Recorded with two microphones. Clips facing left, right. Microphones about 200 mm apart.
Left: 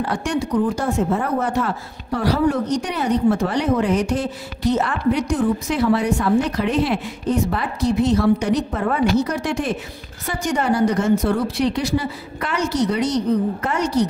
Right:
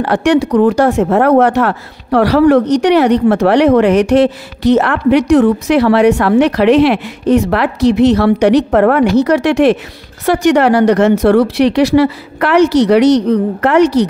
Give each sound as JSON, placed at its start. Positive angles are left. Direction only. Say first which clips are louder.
{"t": 0.0, "sound": "speech", "louder": "right 11 dB", "side_deg": -70}